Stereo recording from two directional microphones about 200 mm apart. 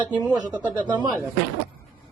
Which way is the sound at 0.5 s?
10° right (ahead or behind).